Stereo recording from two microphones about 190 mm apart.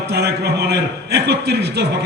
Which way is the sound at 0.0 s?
60° right (ahead or behind).